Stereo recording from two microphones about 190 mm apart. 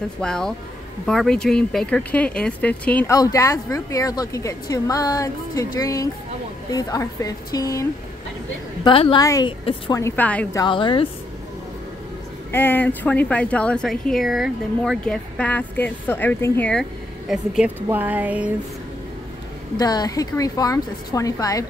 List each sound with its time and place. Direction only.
0.2 s a woman's voice: 5° left (ahead or behind)
8.8 s a woman's voice: 25° left (ahead or behind)
9.9 s speech: 10° left (ahead or behind)
10.6 s a woman's voice: 25° left (ahead or behind)
12.4 s speech: 10° left (ahead or behind)
17.3 s speech: 5° right (ahead or behind)
17.8 s a sound: 10° right (ahead or behind)
19.8 s a woman's voice: 20° left (ahead or behind)